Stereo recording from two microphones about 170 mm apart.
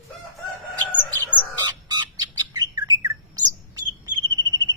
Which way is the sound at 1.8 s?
25° right (ahead or behind).